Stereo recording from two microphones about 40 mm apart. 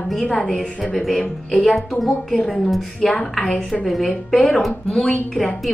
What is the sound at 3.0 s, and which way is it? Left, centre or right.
Speech, centre.